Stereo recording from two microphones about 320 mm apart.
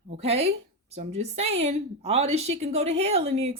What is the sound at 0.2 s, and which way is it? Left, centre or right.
A woman's voice, centre.